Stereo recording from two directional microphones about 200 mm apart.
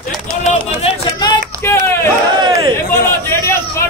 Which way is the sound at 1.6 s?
15° left (ahead or behind).